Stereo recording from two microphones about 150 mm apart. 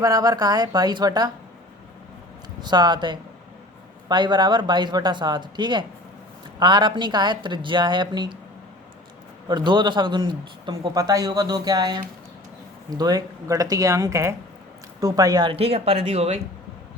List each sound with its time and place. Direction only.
0.0 s speech: 25° right (ahead or behind)
2.6 s a woman's voice: 30° right (ahead or behind)
9.5 s speech: 30° right (ahead or behind)
15.5 s a woman's voice: 40° right (ahead or behind)